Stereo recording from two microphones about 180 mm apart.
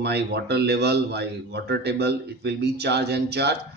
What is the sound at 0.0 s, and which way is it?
Speech, 65° right (ahead or behind).